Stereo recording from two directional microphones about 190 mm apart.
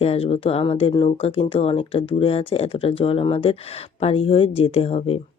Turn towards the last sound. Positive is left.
turn(degrees=30)  # may be behind; listen again after turning